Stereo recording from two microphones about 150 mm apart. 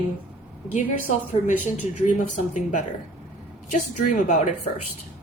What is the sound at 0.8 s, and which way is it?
Speech, 55° left (ahead or behind).